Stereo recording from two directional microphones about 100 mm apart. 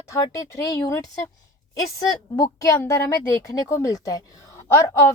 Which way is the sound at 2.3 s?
35° left (ahead or behind).